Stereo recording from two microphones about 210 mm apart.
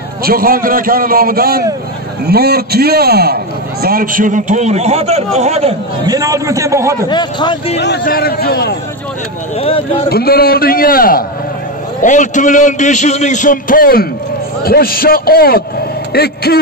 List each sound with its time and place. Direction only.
0.2 s a man's voice: 45° right (ahead or behind); by 6.1 s 30° right (ahead or behind)
6.1 s a man's voice: 15° right (ahead or behind)
7.1 s a man's voice: 20° left (ahead or behind)
7.7 s a man's voice: 55° left (ahead or behind)
9.6 s a man's voice: 25° left (ahead or behind)
10.0 s a man's voice: 45° left (ahead or behind)